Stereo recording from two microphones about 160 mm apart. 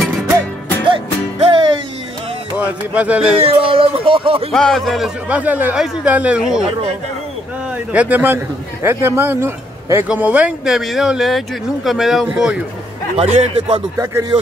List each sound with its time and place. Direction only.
0.8 s music: 30° right (ahead or behind)
2.5 s music: 10° right (ahead or behind)
3.3 s speech: 35° right (ahead or behind)
4.5 s speech: 5° left (ahead or behind)
7.7 s a man's voice: 10° right (ahead or behind)
13.1 s a man's voice: 40° right (ahead or behind)